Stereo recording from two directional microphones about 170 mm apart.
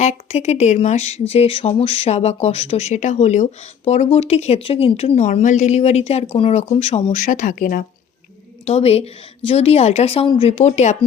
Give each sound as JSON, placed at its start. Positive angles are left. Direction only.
{"t": 0.0, "sound": "speech", "side_deg": 40}
{"t": 8.6, "sound": "speech", "side_deg": 40}